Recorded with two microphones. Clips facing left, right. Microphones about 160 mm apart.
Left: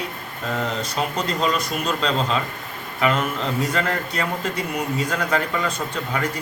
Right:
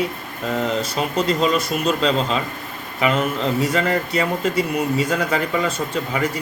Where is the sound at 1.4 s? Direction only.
5° right (ahead or behind).